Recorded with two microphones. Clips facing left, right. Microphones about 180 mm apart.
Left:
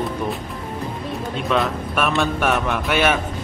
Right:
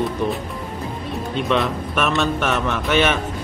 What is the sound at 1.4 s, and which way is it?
A man's voice, centre (ahead or behind).